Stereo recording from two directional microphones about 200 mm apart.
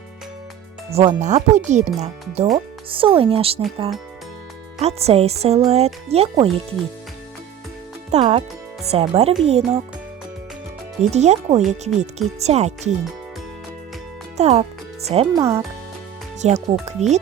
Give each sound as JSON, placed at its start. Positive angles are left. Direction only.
{"t": 0.9, "sound": "speech", "side_deg": -35}
{"t": 4.8, "sound": "speech", "side_deg": -30}
{"t": 8.1, "sound": "speech", "side_deg": -30}
{"t": 11.0, "sound": "speech", "side_deg": -35}
{"t": 14.3, "sound": "a child's voice", "side_deg": -35}
{"t": 15.3, "sound": "speech", "side_deg": -15}
{"t": 16.4, "sound": "speech", "side_deg": -35}